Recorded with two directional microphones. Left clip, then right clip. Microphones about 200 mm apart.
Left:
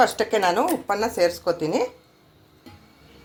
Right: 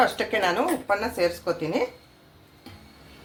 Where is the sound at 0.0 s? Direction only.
45° left (ahead or behind).